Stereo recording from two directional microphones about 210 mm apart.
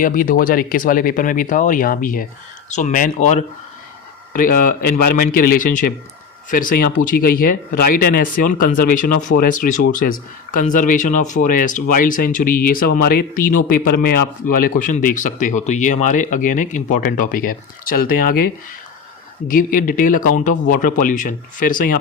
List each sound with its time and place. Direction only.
0.0 s speech: 40° left (ahead or behind)